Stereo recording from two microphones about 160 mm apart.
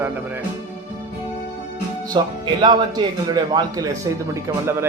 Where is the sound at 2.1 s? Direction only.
25° right (ahead or behind).